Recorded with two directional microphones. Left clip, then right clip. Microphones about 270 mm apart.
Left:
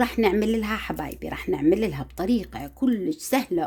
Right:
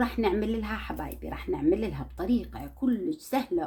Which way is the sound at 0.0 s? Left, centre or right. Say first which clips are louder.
Left 6 dB; left.